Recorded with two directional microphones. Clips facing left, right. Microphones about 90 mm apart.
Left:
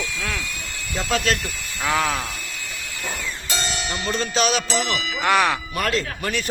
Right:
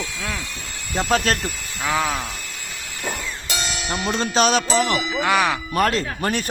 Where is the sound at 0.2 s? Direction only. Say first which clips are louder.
Even; 20° right (ahead or behind).